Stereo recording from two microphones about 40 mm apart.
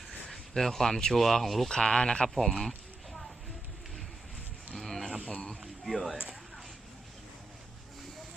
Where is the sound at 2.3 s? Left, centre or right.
Centre.